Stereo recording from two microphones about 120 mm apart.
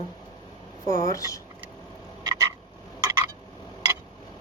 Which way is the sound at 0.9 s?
30° left (ahead or behind).